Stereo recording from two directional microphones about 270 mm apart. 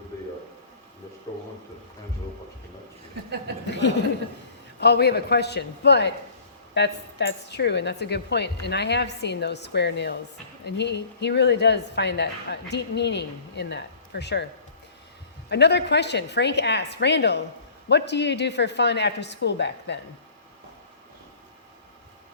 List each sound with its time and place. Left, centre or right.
4.8 s speech: left
15.4 s speech: left